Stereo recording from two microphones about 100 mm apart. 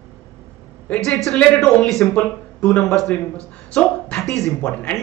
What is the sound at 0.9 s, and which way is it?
A man's voice, 10° left (ahead or behind).